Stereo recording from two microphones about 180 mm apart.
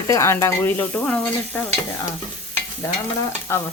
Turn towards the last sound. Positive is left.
turn(degrees=15)  # may be behind; listen again after turning